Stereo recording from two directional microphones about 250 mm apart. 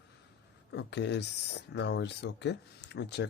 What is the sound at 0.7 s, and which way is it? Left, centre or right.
Speech, left.